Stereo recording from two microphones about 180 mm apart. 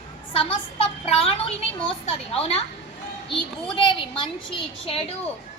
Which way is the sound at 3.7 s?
25° left (ahead or behind).